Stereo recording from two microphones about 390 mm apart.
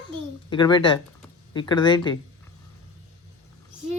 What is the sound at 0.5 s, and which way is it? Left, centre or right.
Speech, centre.